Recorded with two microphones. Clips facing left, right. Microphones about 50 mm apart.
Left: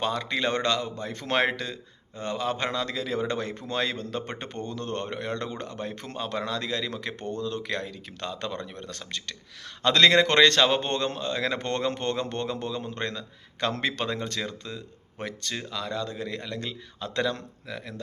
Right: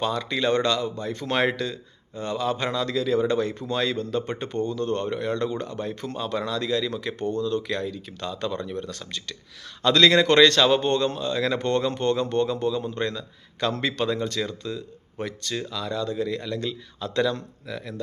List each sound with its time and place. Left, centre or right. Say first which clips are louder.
0.0 s a man's voice: right 2 dB; left
7.2 s speech: right 9 dB; left
7.4 s speech: right 4 dB; left
15.5 s a man's voice: right 4 dB; left